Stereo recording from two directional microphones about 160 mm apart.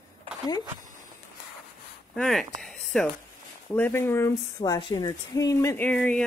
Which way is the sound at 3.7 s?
15° left (ahead or behind).